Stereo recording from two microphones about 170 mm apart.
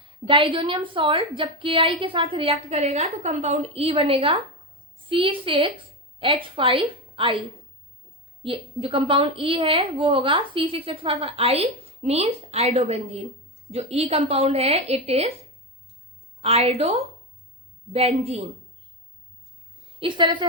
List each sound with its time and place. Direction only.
0.0 s a woman's voice: 30° right (ahead or behind)
8.4 s a woman's voice: 30° right (ahead or behind)
16.4 s a woman's voice: 35° right (ahead or behind)
20.0 s a woman's voice: 30° right (ahead or behind)